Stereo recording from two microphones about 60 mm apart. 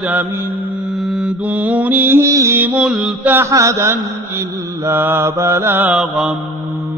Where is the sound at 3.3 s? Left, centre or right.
Right.